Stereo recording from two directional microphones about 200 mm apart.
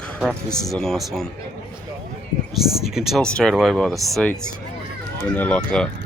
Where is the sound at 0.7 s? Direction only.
Centre (ahead or behind).